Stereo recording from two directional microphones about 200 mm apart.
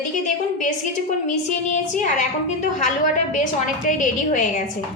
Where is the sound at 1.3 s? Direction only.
40° left (ahead or behind).